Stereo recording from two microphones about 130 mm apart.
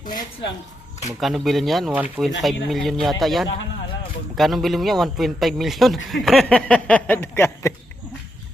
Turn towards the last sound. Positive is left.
turn(degrees=20)  # may be behind; listen again after turning